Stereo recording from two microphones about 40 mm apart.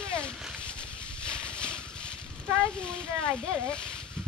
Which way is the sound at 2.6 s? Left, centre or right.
Left.